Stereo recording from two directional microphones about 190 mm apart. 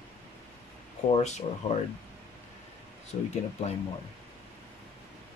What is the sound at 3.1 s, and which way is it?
Speech, 35° left (ahead or behind).